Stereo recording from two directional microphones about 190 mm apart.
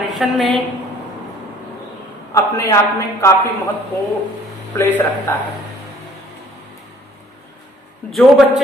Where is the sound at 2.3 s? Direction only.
15° left (ahead or behind).